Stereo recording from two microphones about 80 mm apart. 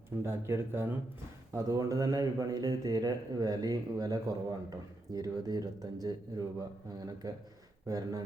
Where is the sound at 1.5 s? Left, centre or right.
Right.